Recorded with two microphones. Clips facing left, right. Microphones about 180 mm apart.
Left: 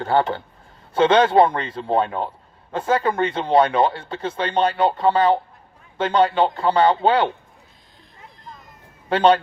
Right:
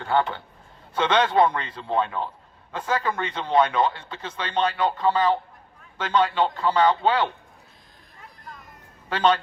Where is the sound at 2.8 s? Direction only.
30° left (ahead or behind).